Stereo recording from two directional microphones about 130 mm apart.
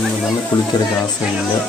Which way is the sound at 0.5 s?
30° left (ahead or behind).